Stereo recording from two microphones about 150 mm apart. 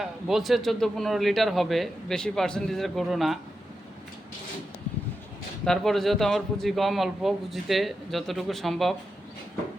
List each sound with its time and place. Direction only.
0.0 s speech: centre (ahead or behind)
5.6 s speech: centre (ahead or behind)